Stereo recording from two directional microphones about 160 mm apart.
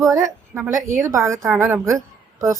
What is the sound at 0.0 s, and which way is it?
A woman's voice, 20° right (ahead or behind).